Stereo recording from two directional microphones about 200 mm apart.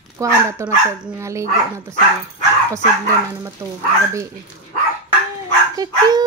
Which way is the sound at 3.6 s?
15° right (ahead or behind).